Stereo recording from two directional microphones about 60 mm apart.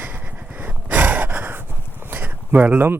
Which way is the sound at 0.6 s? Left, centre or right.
Right.